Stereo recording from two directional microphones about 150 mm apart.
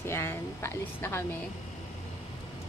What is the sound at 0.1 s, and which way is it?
A woman's voice, 15° left (ahead or behind).